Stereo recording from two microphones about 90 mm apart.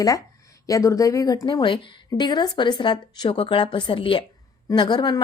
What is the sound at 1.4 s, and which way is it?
Speech, 60° left (ahead or behind).